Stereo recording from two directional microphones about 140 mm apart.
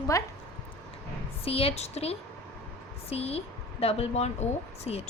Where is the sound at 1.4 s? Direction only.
45° left (ahead or behind).